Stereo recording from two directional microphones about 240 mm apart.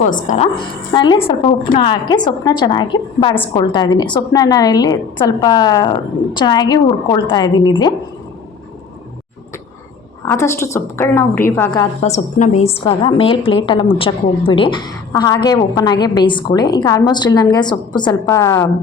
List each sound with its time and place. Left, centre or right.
0.0 s a woman's voice: left
0.9 s a woman's voice: centre
10.2 s a woman's voice: centre
12.0 s a woman's voice: left; by 18.7 s centre